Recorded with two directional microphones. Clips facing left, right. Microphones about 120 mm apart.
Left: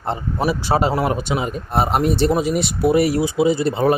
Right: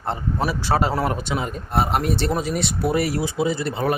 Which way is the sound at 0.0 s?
20° left (ahead or behind).